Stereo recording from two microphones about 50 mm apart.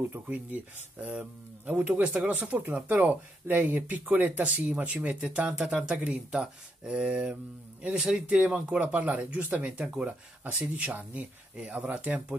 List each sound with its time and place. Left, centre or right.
0.3 s speech: right